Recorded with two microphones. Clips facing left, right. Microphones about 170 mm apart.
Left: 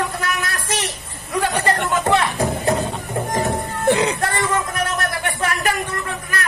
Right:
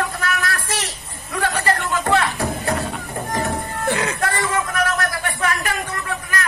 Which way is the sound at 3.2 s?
20° left (ahead or behind).